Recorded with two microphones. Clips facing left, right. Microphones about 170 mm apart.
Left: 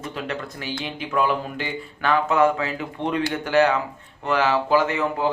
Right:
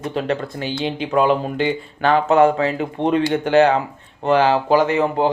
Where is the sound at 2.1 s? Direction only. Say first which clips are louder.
Right 5 dB; 35° right (ahead or behind).